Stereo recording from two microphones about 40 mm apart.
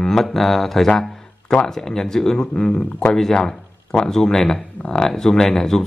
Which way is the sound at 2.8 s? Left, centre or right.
Left.